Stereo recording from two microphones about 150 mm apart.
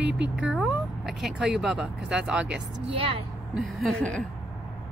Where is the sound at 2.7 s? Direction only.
40° right (ahead or behind).